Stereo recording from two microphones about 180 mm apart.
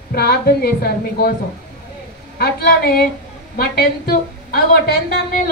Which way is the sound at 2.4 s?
60° left (ahead or behind).